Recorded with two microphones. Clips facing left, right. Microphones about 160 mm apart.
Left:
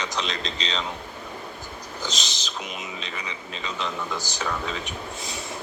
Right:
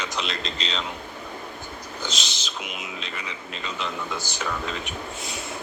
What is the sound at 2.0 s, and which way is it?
A man's voice, centre (ahead or behind).